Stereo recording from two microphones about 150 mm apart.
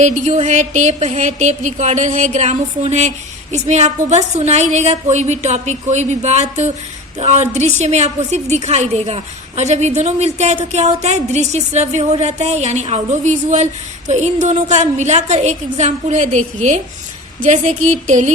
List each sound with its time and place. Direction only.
0.0 s a woman's voice: 50° right (ahead or behind)